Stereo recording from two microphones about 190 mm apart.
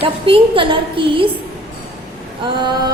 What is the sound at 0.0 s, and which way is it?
A woman's voice, 30° right (ahead or behind).